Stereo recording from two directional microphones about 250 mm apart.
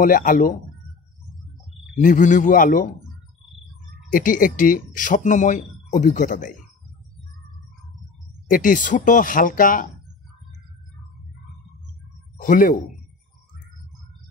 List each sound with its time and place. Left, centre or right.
0.0 s speech: left
2.0 s speech: left
4.1 s speech: left
8.5 s speech: left
12.4 s speech: left